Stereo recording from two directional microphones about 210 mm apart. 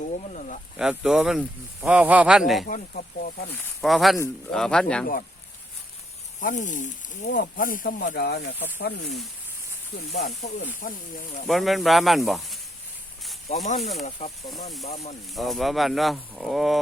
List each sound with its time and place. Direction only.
0.3 s speech: 35° left (ahead or behind)
0.8 s speech: 5° right (ahead or behind)
2.6 s speech: 40° left (ahead or behind)
3.8 s speech: centre (ahead or behind)
6.4 s speech: 35° left (ahead or behind)
10.1 s speech: 35° left (ahead or behind)
11.4 s speech: centre (ahead or behind)
13.7 s speech: 35° left (ahead or behind)
15.4 s speech: centre (ahead or behind)